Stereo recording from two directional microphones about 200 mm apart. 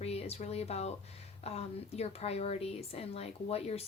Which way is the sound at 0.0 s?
30° left (ahead or behind).